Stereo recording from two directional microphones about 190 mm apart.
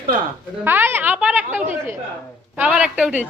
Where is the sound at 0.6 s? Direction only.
10° right (ahead or behind).